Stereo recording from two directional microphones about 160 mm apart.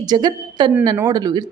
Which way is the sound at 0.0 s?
25° right (ahead or behind).